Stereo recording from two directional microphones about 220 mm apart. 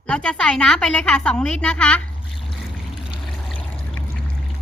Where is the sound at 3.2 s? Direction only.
5° left (ahead or behind).